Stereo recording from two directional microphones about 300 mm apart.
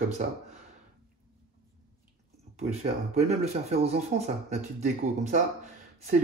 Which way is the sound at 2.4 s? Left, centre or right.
Right.